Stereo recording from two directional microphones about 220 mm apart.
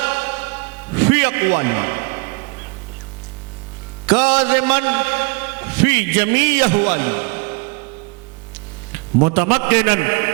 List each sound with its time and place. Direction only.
0.0 s music: 15° right (ahead or behind)
4.0 s a man's voice: 10° right (ahead or behind)
9.2 s a man's voice: 15° right (ahead or behind)